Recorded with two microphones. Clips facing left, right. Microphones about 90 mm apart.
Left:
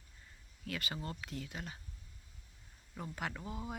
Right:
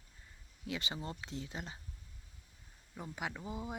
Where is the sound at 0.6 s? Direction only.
20° right (ahead or behind).